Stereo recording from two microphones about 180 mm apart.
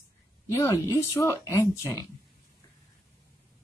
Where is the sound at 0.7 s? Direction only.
15° left (ahead or behind).